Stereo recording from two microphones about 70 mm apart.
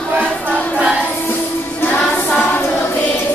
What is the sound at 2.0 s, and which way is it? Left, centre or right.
Choir, left.